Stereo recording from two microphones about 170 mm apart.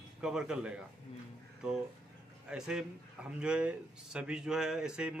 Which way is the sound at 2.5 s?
5° right (ahead or behind).